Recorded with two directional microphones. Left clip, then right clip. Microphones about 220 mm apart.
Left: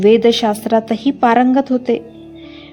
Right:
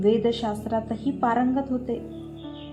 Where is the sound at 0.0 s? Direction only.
45° left (ahead or behind).